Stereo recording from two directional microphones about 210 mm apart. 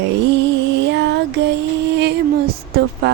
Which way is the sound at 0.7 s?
55° right (ahead or behind).